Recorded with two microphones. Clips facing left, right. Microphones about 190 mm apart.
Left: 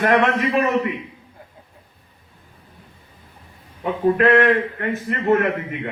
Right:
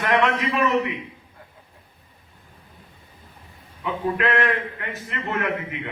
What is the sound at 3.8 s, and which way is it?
A man's voice, 45° left (ahead or behind).